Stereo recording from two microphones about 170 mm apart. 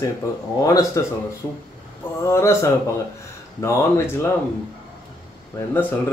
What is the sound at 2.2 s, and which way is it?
Speech, 15° left (ahead or behind).